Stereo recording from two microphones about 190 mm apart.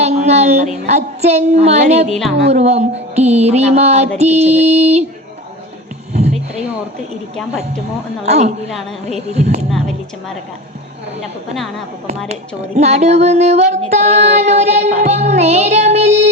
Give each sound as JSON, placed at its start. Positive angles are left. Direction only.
{"t": 0.0, "sound": "a woman's voice", "side_deg": -35}
{"t": 2.0, "sound": "speech", "side_deg": 0}
{"t": 2.5, "sound": "music", "side_deg": -35}
{"t": 6.1, "sound": "a sound", "side_deg": -35}
{"t": 8.2, "sound": "music", "side_deg": -35}
{"t": 9.6, "sound": "speech", "side_deg": 0}
{"t": 12.3, "sound": "music", "side_deg": -35}